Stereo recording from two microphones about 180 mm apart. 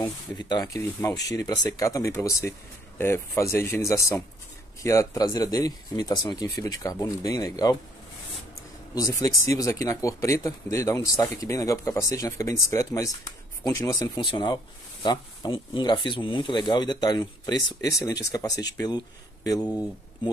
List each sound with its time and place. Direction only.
0.0 s speech: 25° left (ahead or behind)
8.9 s speech: 20° left (ahead or behind)